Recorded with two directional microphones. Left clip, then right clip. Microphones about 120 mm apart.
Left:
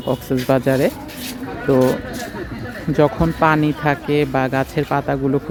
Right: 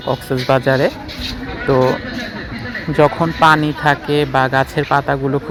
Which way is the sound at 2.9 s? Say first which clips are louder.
Right 3 dB; 20° left (ahead or behind).